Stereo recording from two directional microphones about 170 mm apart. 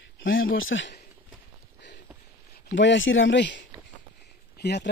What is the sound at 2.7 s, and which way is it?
Speech, 90° left.